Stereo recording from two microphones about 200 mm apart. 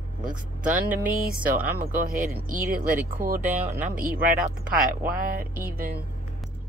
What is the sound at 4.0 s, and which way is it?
Speech, 45° right (ahead or behind).